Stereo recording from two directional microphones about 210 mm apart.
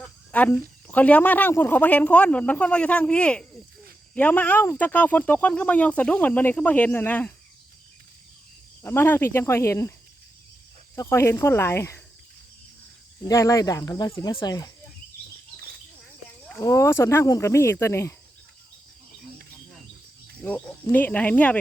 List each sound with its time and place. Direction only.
0.3 s speech: 5° left (ahead or behind)
8.8 s speech: 10° left (ahead or behind)
10.9 s speech: 10° left (ahead or behind)
13.2 s speech: 15° left (ahead or behind)
16.6 s speech: 15° left (ahead or behind)
20.4 s speech: 10° left (ahead or behind)